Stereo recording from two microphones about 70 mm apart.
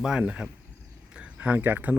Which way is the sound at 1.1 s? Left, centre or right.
Centre.